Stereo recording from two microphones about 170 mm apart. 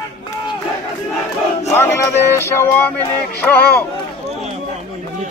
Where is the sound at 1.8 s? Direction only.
15° left (ahead or behind).